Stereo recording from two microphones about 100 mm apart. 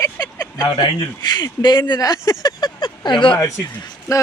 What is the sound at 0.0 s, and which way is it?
Speech, 40° left (ahead or behind).